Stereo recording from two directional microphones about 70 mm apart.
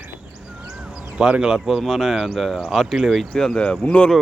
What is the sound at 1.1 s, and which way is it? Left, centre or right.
Speech, centre.